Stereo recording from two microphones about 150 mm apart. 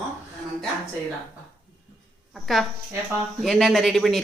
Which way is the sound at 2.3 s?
Centre (ahead or behind).